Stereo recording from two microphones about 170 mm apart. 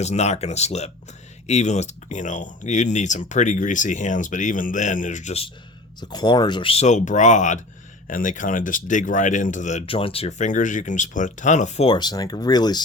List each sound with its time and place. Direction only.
0.0 s speech: 40° left (ahead or behind)
6.0 s speech: 25° left (ahead or behind)